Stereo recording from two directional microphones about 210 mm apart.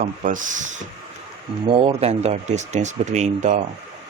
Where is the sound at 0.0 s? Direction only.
40° right (ahead or behind).